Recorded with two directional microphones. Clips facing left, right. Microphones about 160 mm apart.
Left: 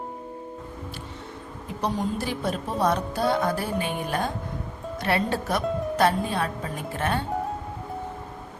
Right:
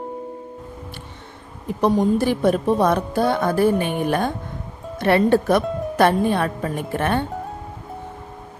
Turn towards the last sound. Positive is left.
turn(degrees=-60)  # may be behind; listen again after turning